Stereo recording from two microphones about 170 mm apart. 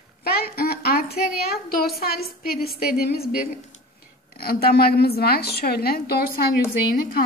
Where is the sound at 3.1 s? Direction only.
65° left (ahead or behind).